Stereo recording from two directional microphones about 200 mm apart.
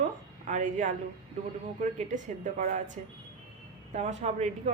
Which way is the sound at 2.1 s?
40° right (ahead or behind).